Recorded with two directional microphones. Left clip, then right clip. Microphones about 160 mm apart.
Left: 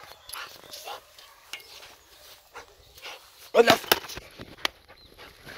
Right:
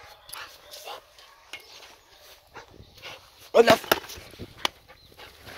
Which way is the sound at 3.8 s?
65° right (ahead or behind).